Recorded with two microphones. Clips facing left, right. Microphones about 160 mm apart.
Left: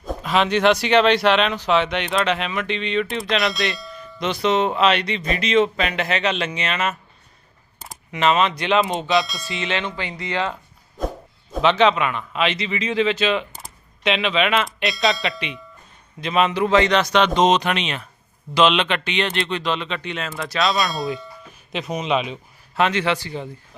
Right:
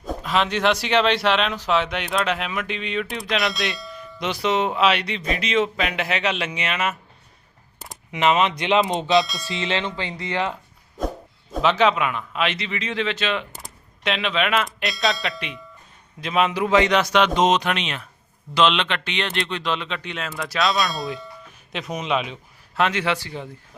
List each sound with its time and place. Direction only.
0.0 s speech: centre (ahead or behind)
8.1 s speech: 15° right (ahead or behind)
9.2 s speech: centre (ahead or behind)
9.5 s speech: 25° right (ahead or behind)
11.5 s speech: 5° right (ahead or behind)